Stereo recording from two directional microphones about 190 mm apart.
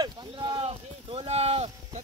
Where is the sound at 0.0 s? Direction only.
25° right (ahead or behind).